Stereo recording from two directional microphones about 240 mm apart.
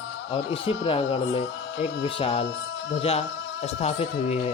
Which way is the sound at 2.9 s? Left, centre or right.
Left.